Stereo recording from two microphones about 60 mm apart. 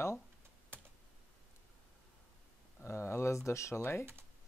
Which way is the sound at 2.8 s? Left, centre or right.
Left.